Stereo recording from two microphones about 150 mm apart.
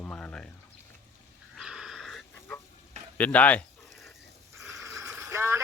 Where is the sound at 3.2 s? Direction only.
10° left (ahead or behind).